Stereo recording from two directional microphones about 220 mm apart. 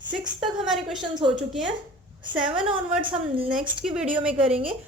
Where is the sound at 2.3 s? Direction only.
5° right (ahead or behind).